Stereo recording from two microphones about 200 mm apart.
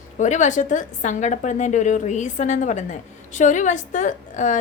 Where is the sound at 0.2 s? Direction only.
40° left (ahead or behind).